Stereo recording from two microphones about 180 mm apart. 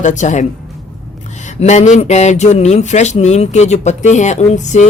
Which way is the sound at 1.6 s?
40° left (ahead or behind).